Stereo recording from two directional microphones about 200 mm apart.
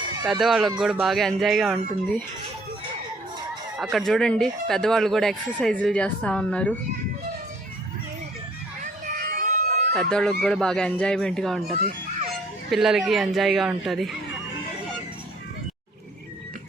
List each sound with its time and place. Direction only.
0.3 s speech: centre (ahead or behind)
3.8 s speech: centre (ahead or behind)
8.8 s a sound: 45° right (ahead or behind)
9.9 s speech: 5° left (ahead or behind)
12.7 s speech: centre (ahead or behind)